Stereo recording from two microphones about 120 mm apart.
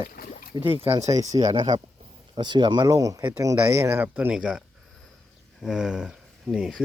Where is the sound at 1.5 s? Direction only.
40° right (ahead or behind).